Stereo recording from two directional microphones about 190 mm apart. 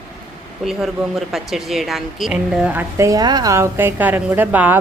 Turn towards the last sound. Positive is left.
turn(degrees=-10)  # may be behind; listen again after turning